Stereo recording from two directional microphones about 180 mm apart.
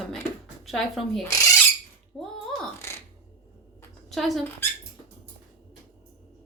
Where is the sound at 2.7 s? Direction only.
15° left (ahead or behind).